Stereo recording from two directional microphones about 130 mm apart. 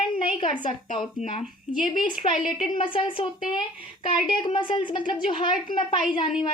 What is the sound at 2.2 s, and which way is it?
Speech, 40° left (ahead or behind).